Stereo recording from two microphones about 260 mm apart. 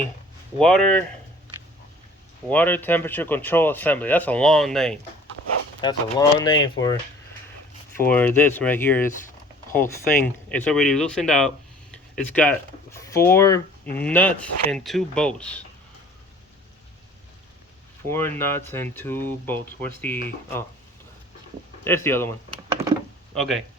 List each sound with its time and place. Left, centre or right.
0.6 s speech: centre
2.5 s speech: centre
5.8 s speech: centre
7.9 s speech: centre
10.2 s speech: centre
18.1 s speech: centre
21.8 s speech: centre